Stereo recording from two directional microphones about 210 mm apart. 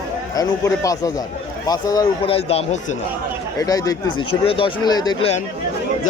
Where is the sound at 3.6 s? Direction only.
15° left (ahead or behind).